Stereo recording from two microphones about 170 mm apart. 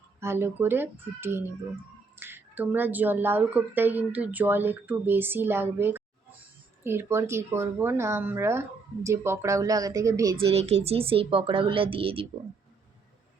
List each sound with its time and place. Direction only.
0.2 s speech: 15° right (ahead or behind)
10.4 s speech: 35° right (ahead or behind)